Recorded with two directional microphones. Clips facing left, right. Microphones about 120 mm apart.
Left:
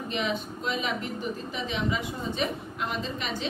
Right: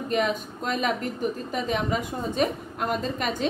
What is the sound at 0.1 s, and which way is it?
A woman's voice, 45° right (ahead or behind).